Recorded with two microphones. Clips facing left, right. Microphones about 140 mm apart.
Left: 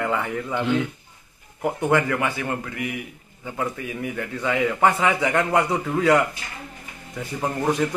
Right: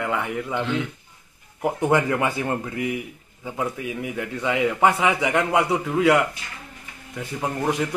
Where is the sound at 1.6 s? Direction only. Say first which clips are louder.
Right 1 dB; 15° right (ahead or behind).